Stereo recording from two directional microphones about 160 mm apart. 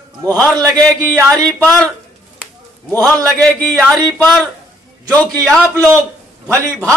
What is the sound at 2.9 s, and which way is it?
Speech, 15° left (ahead or behind).